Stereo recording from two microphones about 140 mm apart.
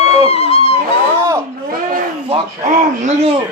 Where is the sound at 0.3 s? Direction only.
45° left (ahead or behind).